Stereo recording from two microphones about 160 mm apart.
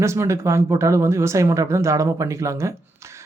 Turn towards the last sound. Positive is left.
turn(degrees=-15)  # may be behind; listen again after turning